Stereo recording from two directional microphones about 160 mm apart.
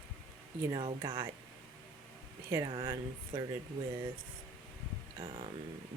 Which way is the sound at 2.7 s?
30° right (ahead or behind).